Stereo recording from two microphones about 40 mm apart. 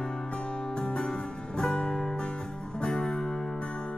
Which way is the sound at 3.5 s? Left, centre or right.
Left.